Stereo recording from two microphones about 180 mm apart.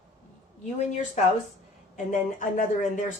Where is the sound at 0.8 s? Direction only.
40° left (ahead or behind).